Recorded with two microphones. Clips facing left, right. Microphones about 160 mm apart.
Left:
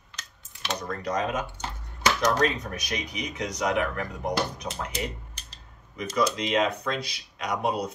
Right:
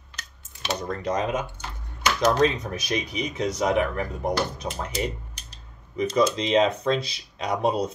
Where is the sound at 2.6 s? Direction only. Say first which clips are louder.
Right 5 dB; 25° right (ahead or behind).